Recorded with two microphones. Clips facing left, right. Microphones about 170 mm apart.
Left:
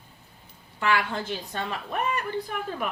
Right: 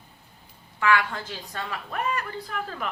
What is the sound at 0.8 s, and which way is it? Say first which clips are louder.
A woman's voice: right 2 dB; 30° left (ahead or behind).